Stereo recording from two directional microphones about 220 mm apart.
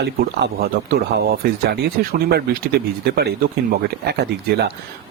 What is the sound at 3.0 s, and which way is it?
Speech, 45° right (ahead or behind).